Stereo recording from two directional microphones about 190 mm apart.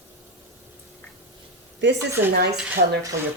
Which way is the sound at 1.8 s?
65° right (ahead or behind).